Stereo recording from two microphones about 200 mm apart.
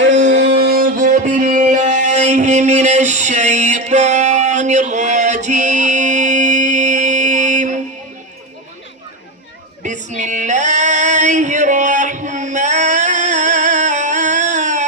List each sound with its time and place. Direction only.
0.3 s music: 60° right (ahead or behind); by 7.7 s 40° right (ahead or behind)
9.8 s music: 40° right (ahead or behind)